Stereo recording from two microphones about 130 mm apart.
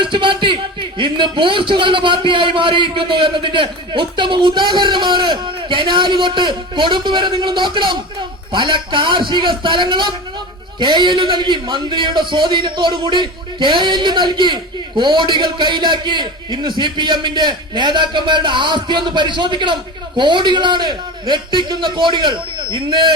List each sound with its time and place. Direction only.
0.0 s a man's voice: 40° right (ahead or behind)